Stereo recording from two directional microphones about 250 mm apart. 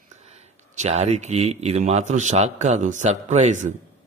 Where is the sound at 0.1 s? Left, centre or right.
Right.